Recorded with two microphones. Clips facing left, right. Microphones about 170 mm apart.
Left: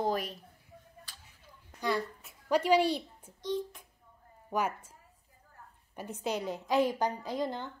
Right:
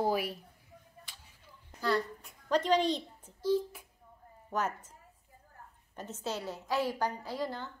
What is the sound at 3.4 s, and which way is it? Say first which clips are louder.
Speech: right 4 dB; 5° right (ahead or behind).